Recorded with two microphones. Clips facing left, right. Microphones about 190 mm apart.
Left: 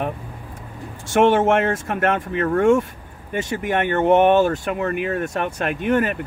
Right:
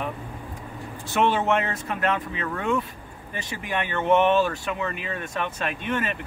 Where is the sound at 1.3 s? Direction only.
50° left (ahead or behind).